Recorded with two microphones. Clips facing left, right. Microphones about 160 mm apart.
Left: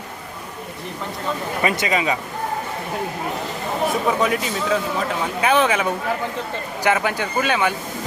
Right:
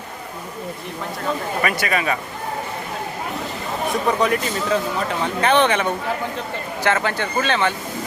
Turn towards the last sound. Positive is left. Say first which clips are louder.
# even
turn(degrees=10)  # may be behind; listen again after turning